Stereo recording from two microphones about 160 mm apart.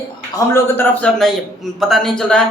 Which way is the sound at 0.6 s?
10° left (ahead or behind).